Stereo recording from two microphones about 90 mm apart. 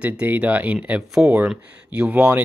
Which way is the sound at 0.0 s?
15° right (ahead or behind).